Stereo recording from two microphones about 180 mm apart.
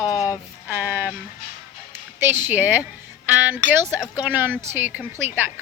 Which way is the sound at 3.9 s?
5° right (ahead or behind).